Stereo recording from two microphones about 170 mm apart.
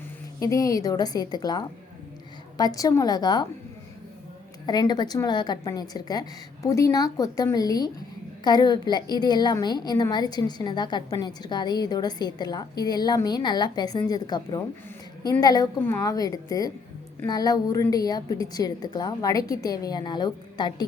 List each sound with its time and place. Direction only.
0.3 s a woman's voice: 20° left (ahead or behind)
4.6 s a woman's voice: 25° left (ahead or behind)